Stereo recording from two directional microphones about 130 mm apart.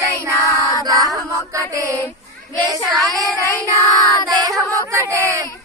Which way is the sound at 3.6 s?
25° right (ahead or behind).